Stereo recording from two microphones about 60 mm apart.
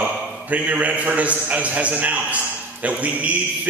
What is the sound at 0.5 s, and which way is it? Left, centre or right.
A man's voice, right.